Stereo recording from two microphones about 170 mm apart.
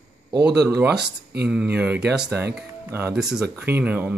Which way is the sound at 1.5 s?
5° right (ahead or behind).